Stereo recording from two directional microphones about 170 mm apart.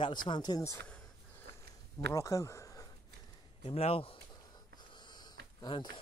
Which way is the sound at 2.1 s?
20° left (ahead or behind).